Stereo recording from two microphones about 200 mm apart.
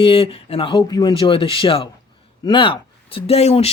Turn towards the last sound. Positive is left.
turn(degrees=30)  # may be behind; listen again after turning